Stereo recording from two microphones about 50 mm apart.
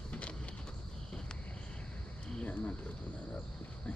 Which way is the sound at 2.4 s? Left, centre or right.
Left.